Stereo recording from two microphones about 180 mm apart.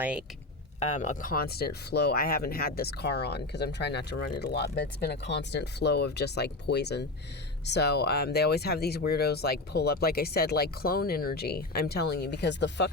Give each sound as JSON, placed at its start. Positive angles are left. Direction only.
{"t": 0.8, "sound": "speech", "side_deg": 40}